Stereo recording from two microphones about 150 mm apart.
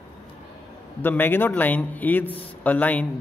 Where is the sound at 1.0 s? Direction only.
15° left (ahead or behind).